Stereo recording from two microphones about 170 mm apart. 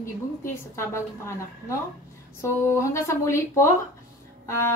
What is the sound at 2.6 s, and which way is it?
Speech, 15° left (ahead or behind).